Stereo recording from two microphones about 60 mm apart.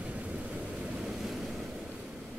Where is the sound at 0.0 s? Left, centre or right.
Right.